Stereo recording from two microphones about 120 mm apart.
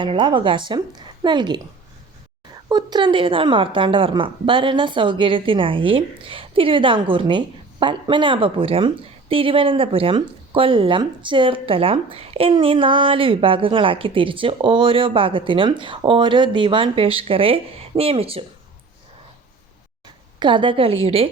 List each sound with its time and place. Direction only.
0.0 s a woman's voice: 40° right (ahead or behind)
2.6 s a woman's voice: 35° right (ahead or behind); by 18.4 s 55° right (ahead or behind)
20.4 s a woman's voice: 40° right (ahead or behind)